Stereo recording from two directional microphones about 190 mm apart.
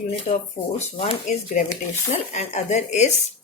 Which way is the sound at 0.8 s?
35° left (ahead or behind).